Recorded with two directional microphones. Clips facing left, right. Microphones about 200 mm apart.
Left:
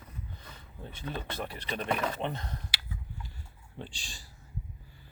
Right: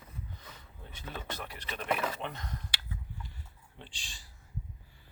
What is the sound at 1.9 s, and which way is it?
Speech, 5° right (ahead or behind).